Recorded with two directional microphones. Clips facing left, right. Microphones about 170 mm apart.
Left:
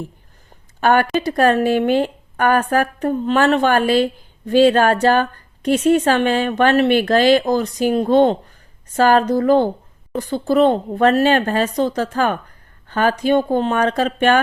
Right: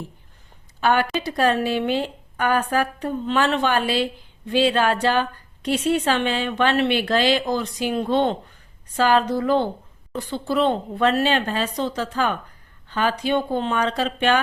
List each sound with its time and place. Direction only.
0.8 s a woman's voice: 50° left (ahead or behind)